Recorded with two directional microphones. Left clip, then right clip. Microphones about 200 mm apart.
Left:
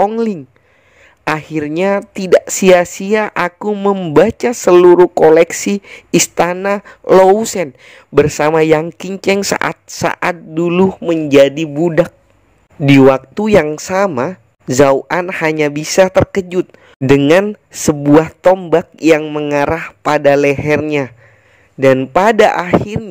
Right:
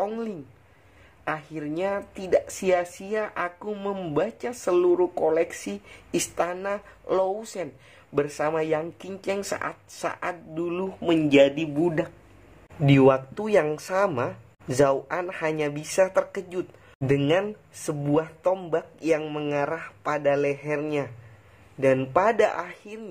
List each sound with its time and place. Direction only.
1.2 s a woman's voice: 50° left (ahead or behind)
11.0 s a man's voice: 30° left (ahead or behind); by 19.2 s 45° left (ahead or behind)
19.2 s a woman's voice: 35° left (ahead or behind)